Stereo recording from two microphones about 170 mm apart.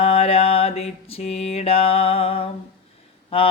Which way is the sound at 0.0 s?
35° left (ahead or behind).